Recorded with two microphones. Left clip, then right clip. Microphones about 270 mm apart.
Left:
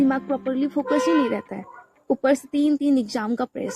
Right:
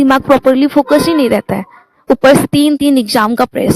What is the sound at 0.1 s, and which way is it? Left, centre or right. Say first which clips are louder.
Speech: right 16 dB; right.